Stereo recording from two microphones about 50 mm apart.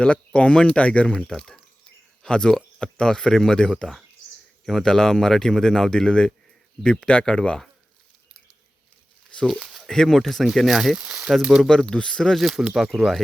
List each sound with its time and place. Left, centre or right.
0.0 s speech: left
9.5 s speech: centre
9.8 s speech: centre
10.9 s speech: right
11.7 s speech: centre
12.4 s speech: centre